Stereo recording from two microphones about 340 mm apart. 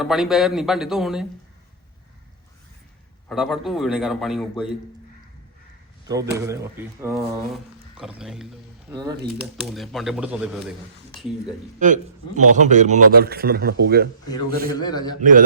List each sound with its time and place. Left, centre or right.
0.0 s a man's voice: centre
3.2 s a man's voice: centre
6.1 s speech: centre
9.7 s a man's voice: centre
11.8 s a man's voice: right
14.8 s a man's voice: centre
15.2 s a man's voice: right